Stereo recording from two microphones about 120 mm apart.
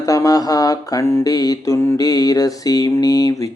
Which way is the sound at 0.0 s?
25° left (ahead or behind).